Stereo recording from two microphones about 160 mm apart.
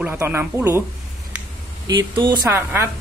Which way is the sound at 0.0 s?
15° right (ahead or behind).